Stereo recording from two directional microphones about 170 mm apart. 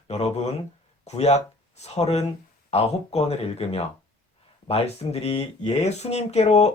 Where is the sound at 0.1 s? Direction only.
40° left (ahead or behind).